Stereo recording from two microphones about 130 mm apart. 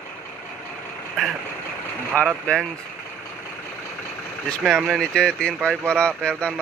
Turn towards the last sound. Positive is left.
turn(degrees=5)  # may be behind; listen again after turning